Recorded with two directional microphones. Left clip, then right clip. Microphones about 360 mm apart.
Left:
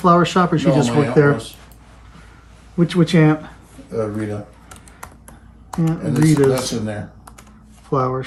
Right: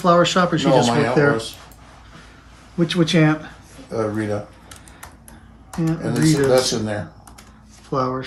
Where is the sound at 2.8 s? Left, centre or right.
Centre.